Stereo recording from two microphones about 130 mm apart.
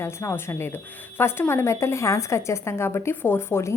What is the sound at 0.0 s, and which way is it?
A woman's voice, 20° left (ahead or behind).